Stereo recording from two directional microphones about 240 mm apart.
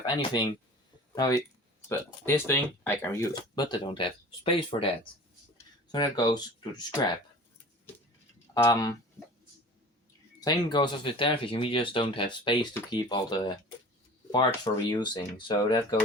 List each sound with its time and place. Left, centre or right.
0.0 s speech: centre
5.9 s speech: centre
8.5 s speech: centre
10.4 s speech: centre